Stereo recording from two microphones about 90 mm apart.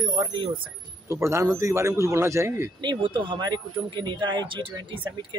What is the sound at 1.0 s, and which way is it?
Speech, 30° right (ahead or behind).